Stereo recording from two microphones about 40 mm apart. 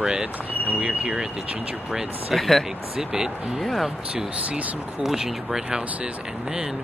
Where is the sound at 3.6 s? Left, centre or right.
Centre.